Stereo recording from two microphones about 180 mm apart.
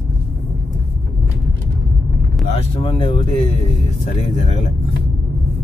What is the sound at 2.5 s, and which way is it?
Speech, 30° left (ahead or behind).